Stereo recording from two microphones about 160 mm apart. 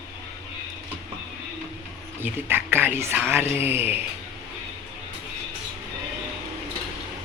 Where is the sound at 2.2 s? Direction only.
10° right (ahead or behind).